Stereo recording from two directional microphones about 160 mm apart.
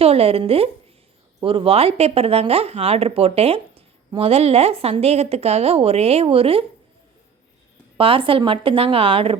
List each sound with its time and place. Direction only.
0.0 s speech: 40° right (ahead or behind)
7.9 s speech: 35° right (ahead or behind)